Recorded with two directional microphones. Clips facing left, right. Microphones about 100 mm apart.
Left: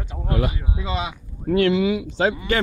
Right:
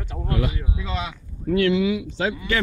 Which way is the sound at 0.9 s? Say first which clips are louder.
Left 3 dB; 5° left (ahead or behind).